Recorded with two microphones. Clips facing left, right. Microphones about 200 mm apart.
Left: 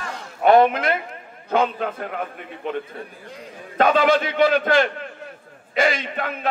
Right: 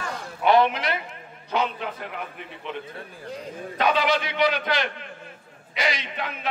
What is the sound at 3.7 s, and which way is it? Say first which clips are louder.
A man's voice: left 6 dB; 50° left (ahead or behind).